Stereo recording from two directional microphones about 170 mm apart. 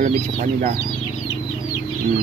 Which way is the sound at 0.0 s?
45° right (ahead or behind).